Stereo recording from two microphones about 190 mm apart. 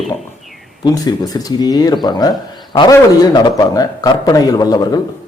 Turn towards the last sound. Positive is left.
turn(degrees=20)  # may be behind; listen again after turning